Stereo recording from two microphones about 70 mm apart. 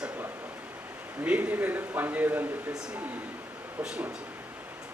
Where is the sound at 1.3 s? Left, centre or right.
Right.